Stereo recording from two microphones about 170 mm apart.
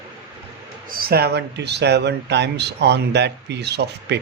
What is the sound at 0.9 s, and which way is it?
Speech, 65° right (ahead or behind).